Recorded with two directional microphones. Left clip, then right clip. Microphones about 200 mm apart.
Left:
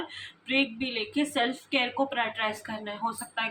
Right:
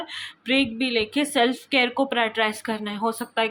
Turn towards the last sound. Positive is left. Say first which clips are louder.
# right 7 dB
turn(degrees=-60)  # may be behind; listen again after turning